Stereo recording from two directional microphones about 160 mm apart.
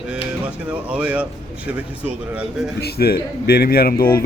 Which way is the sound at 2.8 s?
80° left.